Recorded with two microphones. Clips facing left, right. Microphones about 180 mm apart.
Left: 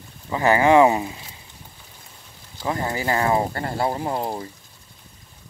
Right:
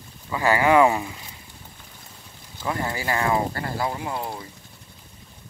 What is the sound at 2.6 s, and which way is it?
Speech, 25° left (ahead or behind).